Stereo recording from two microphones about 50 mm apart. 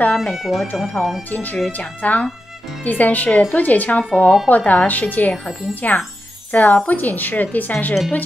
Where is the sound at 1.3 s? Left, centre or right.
Left.